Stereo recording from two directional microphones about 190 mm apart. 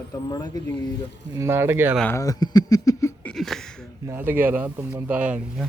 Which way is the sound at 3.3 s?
Centre (ahead or behind).